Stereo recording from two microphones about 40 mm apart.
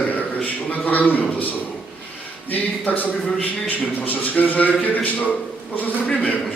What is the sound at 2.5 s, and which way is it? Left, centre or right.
A man's voice, left.